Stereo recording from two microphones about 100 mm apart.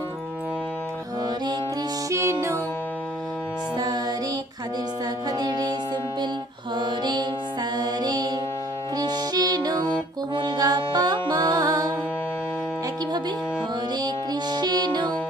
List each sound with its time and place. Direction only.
2.0 s music: 30° right (ahead or behind)
3.8 s music: 40° right (ahead or behind)
5.4 s music: 45° right (ahead or behind)
6.7 s music: 50° right (ahead or behind)
14.5 s music: 45° right (ahead or behind)